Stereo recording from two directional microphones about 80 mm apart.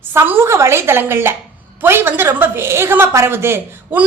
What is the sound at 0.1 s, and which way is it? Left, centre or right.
A woman's voice, right.